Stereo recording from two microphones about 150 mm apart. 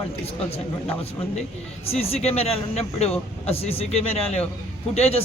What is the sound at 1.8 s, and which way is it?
Speech, 40° left (ahead or behind).